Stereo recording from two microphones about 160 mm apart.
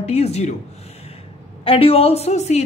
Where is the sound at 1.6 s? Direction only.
35° left (ahead or behind).